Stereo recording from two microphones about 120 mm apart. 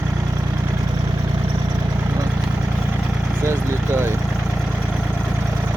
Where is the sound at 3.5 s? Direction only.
20° right (ahead or behind).